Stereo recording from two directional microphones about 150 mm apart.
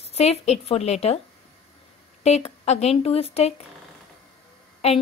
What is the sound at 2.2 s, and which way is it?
Speech, 45° left (ahead or behind).